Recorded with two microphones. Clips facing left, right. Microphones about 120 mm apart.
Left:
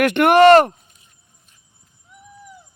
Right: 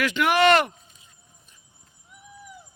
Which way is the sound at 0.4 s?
40° left (ahead or behind).